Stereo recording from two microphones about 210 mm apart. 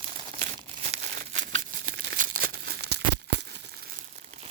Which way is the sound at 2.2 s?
45° right (ahead or behind).